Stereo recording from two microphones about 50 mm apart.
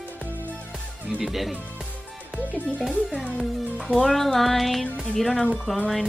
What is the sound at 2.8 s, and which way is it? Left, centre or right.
A woman's voice, centre.